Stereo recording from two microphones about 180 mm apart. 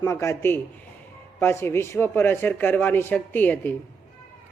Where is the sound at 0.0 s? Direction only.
15° left (ahead or behind).